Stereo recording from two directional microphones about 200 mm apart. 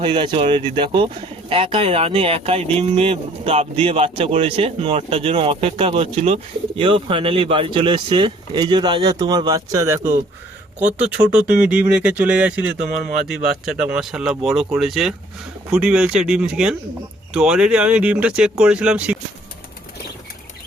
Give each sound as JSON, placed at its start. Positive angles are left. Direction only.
{"t": 0.0, "sound": "speech", "side_deg": -25}